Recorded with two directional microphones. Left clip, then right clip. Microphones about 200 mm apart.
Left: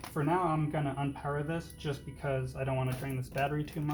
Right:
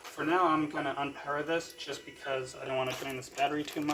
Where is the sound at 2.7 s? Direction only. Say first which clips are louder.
Right 4 dB; 30° right (ahead or behind).